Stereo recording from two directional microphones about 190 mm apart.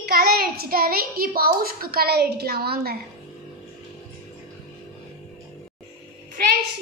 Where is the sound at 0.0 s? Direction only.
55° right (ahead or behind).